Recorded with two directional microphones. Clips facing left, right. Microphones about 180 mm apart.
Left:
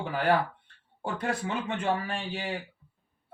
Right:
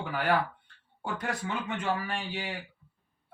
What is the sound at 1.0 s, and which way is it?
A man's voice, 25° left (ahead or behind).